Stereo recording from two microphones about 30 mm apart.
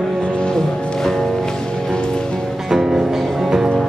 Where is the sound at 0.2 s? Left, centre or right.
Left.